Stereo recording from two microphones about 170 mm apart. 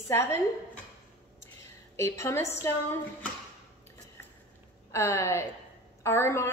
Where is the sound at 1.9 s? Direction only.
15° left (ahead or behind).